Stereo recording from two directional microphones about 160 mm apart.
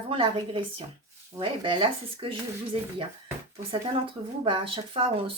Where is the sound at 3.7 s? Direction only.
30° right (ahead or behind).